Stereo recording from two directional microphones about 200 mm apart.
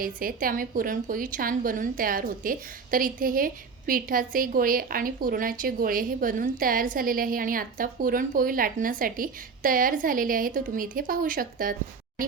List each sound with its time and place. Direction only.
0.0 s a woman's voice: 45° right (ahead or behind)